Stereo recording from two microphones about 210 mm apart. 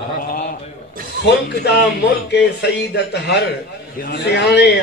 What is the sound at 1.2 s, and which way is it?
Speech, 50° left (ahead or behind).